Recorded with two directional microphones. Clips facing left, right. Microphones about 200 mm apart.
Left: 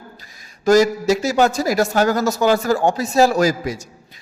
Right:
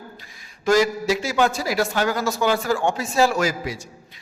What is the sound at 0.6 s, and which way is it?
A man's voice, 40° left (ahead or behind).